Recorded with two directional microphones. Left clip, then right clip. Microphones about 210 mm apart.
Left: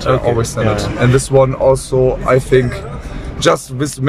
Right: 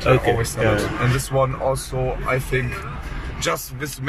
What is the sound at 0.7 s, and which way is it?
Speech, 50° left (ahead or behind).